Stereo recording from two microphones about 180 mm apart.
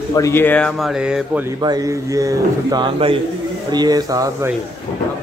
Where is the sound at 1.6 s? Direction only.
20° right (ahead or behind).